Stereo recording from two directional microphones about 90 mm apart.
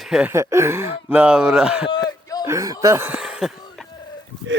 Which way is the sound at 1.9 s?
45° left (ahead or behind).